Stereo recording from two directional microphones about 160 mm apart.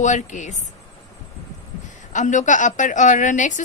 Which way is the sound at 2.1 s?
50° left (ahead or behind).